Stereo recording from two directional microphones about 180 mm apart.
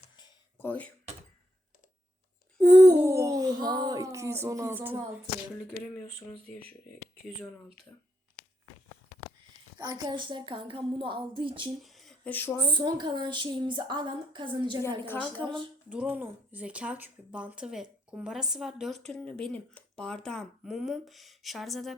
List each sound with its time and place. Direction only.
0.6 s speech: 10° left (ahead or behind)
2.6 s speech: 20° right (ahead or behind); by 7.5 s 5° right (ahead or behind)
9.7 s a woman's voice: 20° right (ahead or behind)
11.8 s a sound: centre (ahead or behind)
12.5 s a woman's voice: 25° right (ahead or behind)
14.8 s a woman's voice: 10° left (ahead or behind)
15.4 s a woman's voice: 25° right (ahead or behind)
15.9 s speech: 5° right (ahead or behind)